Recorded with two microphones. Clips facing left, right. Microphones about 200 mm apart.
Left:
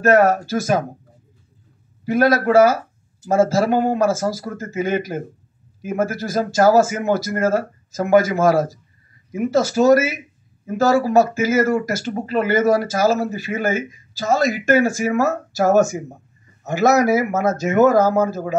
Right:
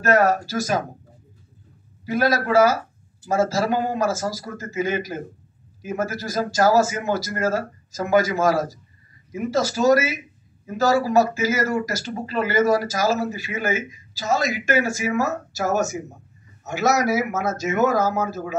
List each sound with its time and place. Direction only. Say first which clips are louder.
0.0 s speech: left 4 dB; 55° left (ahead or behind)
2.0 s speech: left 5 dB; 55° left (ahead or behind)